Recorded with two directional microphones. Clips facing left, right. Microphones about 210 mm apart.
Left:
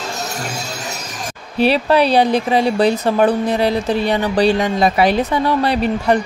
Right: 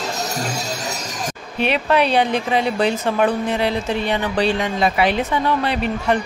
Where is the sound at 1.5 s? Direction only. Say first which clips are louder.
Left 4 dB; 35° left (ahead or behind).